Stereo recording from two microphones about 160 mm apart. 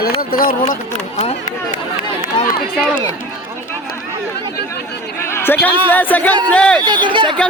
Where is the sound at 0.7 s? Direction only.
50° left (ahead or behind).